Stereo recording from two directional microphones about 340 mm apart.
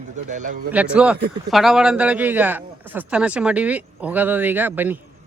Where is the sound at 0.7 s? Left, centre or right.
Centre.